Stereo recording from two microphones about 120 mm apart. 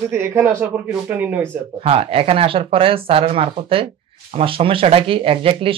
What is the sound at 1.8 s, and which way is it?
Speech, 50° right (ahead or behind).